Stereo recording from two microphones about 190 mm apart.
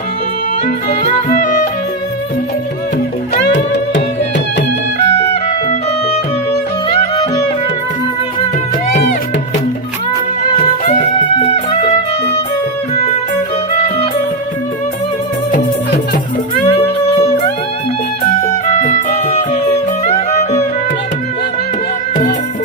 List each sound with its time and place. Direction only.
0.9 s music: 40° left (ahead or behind)
5.6 s music: 30° left (ahead or behind)
10.8 s music: 35° left (ahead or behind)
16.6 s music: 30° left (ahead or behind)
18.7 s music: 40° left (ahead or behind)